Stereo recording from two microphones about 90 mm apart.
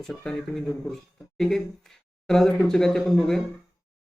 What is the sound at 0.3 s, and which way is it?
Speech, 5° left (ahead or behind).